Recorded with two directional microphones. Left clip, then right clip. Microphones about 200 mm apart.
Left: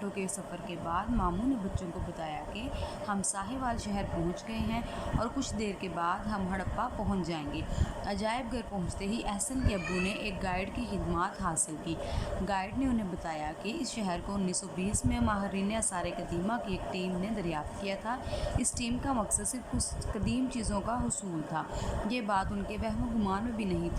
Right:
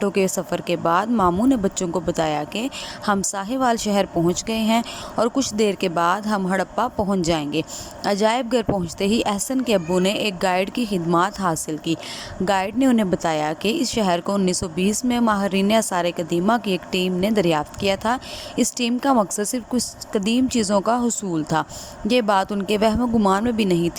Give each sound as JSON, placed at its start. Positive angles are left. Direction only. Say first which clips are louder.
{"t": 0.0, "sound": "a woman's voice", "louder": "right 17 dB", "side_deg": -45}